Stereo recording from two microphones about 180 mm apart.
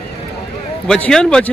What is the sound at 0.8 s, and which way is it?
Speech, 5° left (ahead or behind).